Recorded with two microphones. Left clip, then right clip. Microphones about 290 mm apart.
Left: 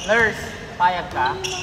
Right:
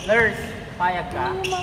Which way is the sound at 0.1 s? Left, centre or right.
Centre.